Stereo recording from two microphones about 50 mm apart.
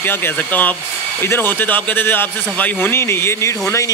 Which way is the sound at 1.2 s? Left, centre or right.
Left.